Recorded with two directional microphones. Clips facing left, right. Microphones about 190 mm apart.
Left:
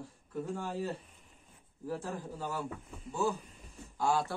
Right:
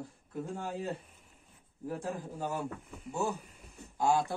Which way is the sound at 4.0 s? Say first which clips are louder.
Right 2 dB; 20° right (ahead or behind).